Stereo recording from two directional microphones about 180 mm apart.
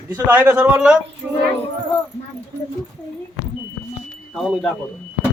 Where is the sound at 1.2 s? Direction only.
5° right (ahead or behind).